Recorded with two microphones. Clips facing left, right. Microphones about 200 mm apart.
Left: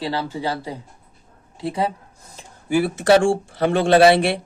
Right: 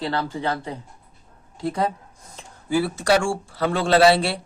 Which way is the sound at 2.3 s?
15° left (ahead or behind).